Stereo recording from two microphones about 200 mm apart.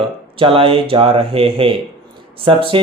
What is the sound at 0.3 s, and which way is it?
Speech, 25° right (ahead or behind).